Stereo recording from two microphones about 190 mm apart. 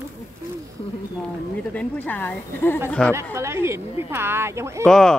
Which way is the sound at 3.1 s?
15° right (ahead or behind).